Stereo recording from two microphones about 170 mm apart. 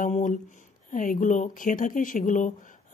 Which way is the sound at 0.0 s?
50° left (ahead or behind).